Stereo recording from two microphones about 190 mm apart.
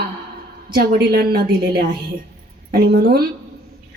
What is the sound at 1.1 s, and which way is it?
Speech, 60° right (ahead or behind).